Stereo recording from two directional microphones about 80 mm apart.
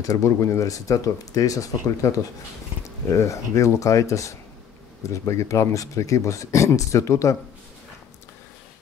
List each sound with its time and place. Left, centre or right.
0.0 s speech: left